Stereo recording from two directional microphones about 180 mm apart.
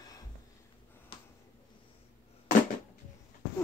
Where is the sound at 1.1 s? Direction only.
30° left (ahead or behind).